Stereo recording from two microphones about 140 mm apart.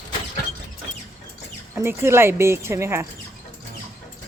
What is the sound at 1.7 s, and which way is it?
Speech, 15° right (ahead or behind).